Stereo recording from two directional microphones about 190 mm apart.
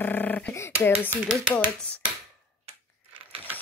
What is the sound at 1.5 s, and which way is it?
Speech, 5° left (ahead or behind).